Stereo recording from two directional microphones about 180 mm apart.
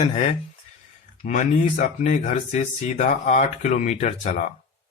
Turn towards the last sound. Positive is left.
turn(degrees=40)  # may be behind; listen again after turning